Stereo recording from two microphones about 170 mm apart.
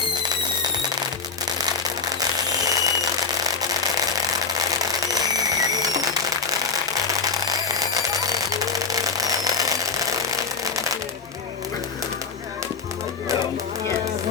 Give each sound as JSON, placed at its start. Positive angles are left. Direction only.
{"t": 2.8, "sound": "alarm clock", "side_deg": -20}
{"t": 4.5, "sound": "alarm clock", "side_deg": -20}
{"t": 6.5, "sound": "a sound", "side_deg": -20}
{"t": 7.9, "sound": "alarm clock", "side_deg": -20}